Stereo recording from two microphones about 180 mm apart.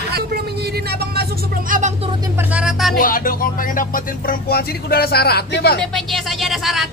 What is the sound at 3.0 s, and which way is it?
Speech, 50° left (ahead or behind).